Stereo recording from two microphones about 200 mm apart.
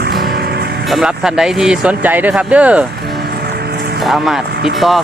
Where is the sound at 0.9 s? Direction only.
Centre (ahead or behind).